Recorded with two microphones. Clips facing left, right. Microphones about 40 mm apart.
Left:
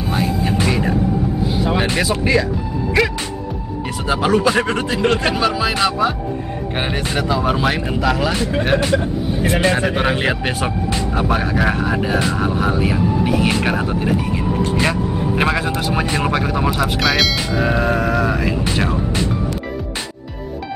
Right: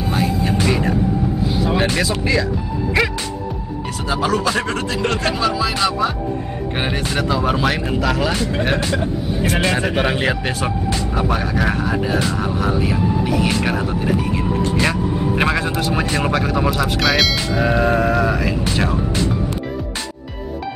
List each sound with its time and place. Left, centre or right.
0.0 s music: centre
0.7 s a sound: centre
1.6 s vehicle: centre
2.0 s speech: centre
3.0 s music: centre
4.1 s speech: left
7.2 s speech: centre
14.1 s speech: centre
18.4 s speech: centre